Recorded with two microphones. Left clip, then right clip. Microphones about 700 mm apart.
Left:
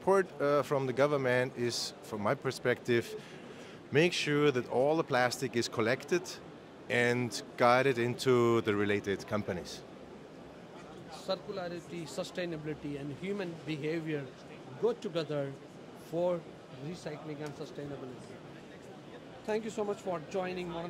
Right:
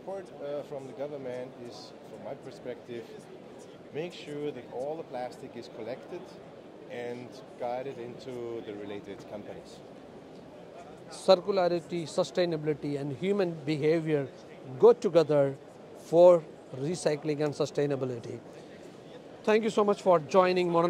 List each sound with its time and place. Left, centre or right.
0.1 s a man's voice: left
11.2 s speech: right
19.4 s speech: right